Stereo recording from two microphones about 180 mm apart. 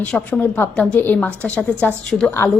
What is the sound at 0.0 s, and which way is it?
A woman's voice, 10° left (ahead or behind).